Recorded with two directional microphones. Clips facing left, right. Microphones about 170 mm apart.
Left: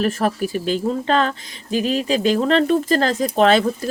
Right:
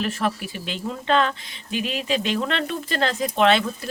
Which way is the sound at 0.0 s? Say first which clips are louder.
Left 5 dB; 45° left (ahead or behind).